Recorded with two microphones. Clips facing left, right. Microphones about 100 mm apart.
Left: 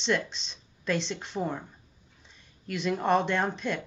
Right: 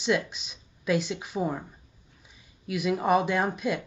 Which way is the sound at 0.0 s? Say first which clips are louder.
Right 2 dB; 5° right (ahead or behind).